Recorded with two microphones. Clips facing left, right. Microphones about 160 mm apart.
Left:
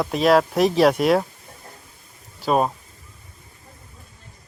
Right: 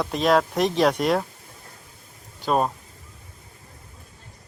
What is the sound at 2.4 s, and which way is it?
Speech, 5° left (ahead or behind).